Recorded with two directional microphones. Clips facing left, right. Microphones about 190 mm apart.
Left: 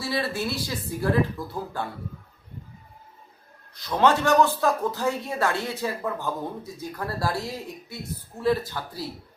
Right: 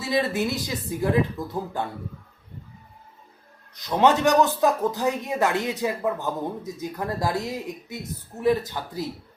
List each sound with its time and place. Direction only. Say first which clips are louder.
0.0 s speech: right 4 dB; 20° right (ahead or behind)
3.8 s speech: right 2 dB; 20° right (ahead or behind)